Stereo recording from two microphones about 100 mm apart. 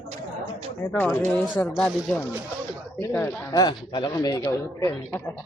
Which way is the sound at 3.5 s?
45° left (ahead or behind).